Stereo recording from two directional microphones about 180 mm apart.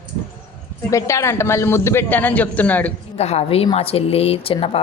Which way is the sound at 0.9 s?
15° left (ahead or behind).